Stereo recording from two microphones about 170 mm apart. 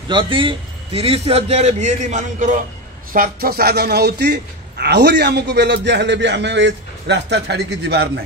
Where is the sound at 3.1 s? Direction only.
60° right (ahead or behind); by 8.1 s 75° right (ahead or behind).